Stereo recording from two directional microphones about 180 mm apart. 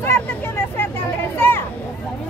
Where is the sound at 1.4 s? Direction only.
10° left (ahead or behind).